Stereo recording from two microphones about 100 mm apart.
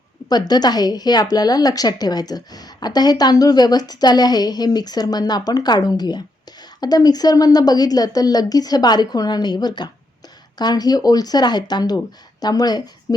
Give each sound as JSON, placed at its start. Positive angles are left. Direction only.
{"t": 0.3, "sound": "a woman's voice", "side_deg": 45}